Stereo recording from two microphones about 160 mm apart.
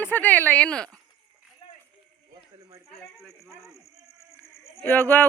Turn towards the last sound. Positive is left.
turn(degrees=10)  # may be behind; listen again after turning